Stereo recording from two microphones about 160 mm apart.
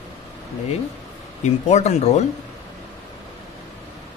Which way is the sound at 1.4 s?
45° left (ahead or behind).